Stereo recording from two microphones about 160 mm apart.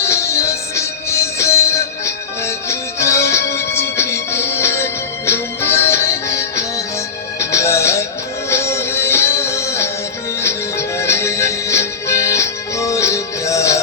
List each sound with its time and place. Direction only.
0.0 s music: 15° left (ahead or behind)